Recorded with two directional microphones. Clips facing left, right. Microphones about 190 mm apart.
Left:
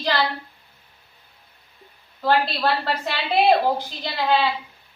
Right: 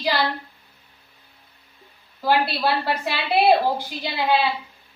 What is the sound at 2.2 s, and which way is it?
A woman's voice, 10° right (ahead or behind).